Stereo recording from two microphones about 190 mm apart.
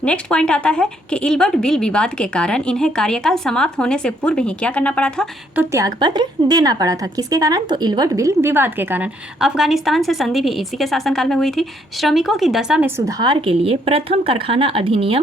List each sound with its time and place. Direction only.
0.0 s a woman's voice: 5° left (ahead or behind)
5.5 s a woman's voice: 15° right (ahead or behind)
13.1 s a woman's voice: 20° right (ahead or behind)